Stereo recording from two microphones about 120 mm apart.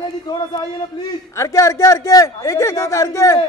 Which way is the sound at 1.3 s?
25° left (ahead or behind).